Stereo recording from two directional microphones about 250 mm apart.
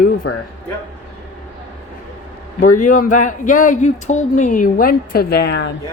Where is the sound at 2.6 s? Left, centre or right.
Left.